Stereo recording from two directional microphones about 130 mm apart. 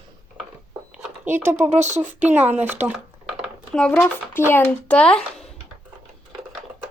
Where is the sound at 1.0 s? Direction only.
15° right (ahead or behind).